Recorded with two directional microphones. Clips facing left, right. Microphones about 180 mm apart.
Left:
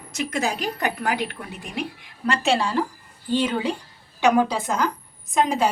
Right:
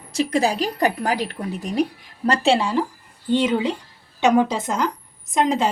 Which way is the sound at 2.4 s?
20° right (ahead or behind).